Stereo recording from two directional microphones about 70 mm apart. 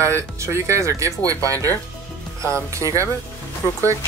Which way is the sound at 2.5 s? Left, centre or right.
Right.